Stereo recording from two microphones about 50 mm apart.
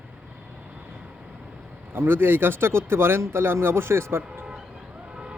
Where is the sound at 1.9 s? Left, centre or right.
Right.